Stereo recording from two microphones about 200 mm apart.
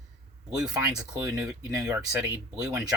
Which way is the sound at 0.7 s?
15° right (ahead or behind).